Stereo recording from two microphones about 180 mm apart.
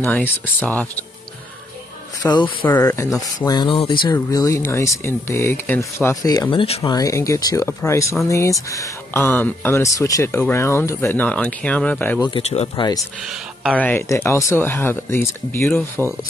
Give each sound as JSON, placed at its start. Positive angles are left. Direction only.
{"t": 0.0, "sound": "speech", "side_deg": 10}
{"t": 2.2, "sound": "speech", "side_deg": 10}
{"t": 12.2, "sound": "speech", "side_deg": 30}
{"t": 13.7, "sound": "speech", "side_deg": 10}